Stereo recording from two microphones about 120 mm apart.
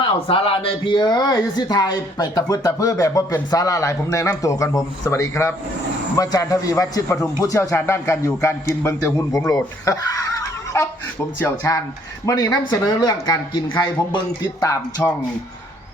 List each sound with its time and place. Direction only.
0.3 s a man's voice: 50° left (ahead or behind); by 10.2 s 25° left (ahead or behind)
11.3 s a man's voice: 20° left (ahead or behind)
12.2 s speech: 30° left (ahead or behind)
14.6 s a man's voice: 30° left (ahead or behind)